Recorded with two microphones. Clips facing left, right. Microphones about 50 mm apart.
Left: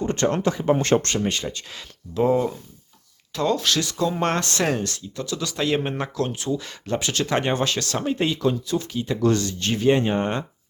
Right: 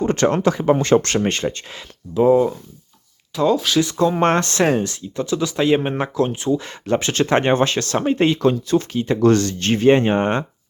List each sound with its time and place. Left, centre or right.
0.0 s speech: right
1.2 s speech: right
2.1 s speech: centre
4.2 s speech: right